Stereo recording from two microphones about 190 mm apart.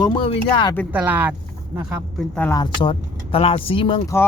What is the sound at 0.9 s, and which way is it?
Speech, 10° right (ahead or behind).